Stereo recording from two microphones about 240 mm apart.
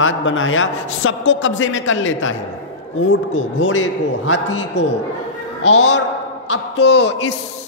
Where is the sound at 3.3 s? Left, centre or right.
Left.